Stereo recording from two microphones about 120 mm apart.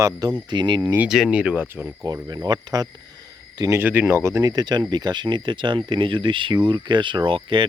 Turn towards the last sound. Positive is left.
turn(degrees=-45)  # may be behind; listen again after turning